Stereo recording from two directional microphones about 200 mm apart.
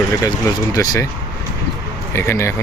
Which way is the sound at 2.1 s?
15° left (ahead or behind).